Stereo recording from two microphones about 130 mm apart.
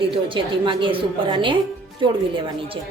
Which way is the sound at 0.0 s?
45° right (ahead or behind).